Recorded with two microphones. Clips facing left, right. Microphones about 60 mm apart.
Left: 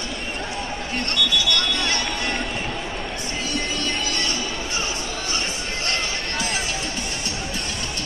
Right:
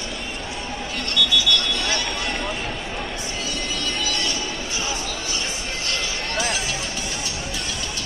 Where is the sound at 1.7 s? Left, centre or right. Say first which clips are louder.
Left 1 dB; left.